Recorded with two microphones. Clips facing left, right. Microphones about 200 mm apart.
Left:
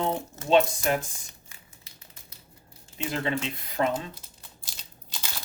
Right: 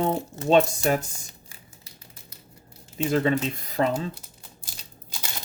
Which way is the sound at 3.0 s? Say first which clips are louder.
Right 7 dB; 40° right (ahead or behind).